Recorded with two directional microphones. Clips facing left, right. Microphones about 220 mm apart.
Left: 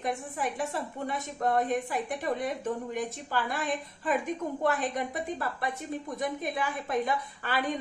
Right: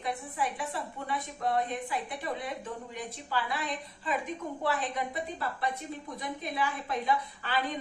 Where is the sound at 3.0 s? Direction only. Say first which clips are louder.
Left 3 dB; 45° left (ahead or behind).